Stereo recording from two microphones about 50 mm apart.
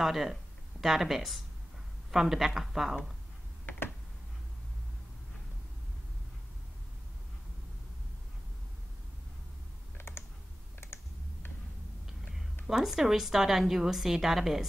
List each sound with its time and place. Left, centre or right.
0.0 s a woman's voice: centre
9.9 s computer keyboard: left
12.6 s a woman's voice: centre